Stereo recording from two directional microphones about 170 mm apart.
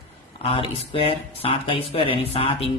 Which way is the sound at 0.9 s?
35° left (ahead or behind).